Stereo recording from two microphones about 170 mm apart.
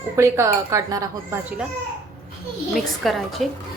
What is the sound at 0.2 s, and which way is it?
Speech, 15° right (ahead or behind).